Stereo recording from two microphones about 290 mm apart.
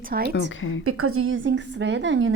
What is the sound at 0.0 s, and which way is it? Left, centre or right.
Speech, right.